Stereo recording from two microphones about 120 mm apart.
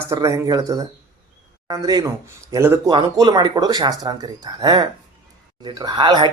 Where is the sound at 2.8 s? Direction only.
35° right (ahead or behind).